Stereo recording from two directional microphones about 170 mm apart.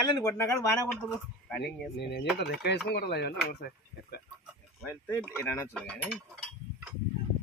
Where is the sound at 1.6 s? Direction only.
80° left.